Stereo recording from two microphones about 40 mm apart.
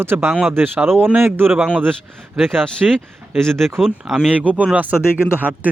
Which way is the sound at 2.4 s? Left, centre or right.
Centre.